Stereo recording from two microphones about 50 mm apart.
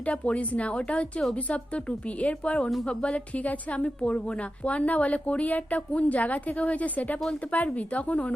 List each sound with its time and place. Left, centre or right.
0.0 s a woman's voice: left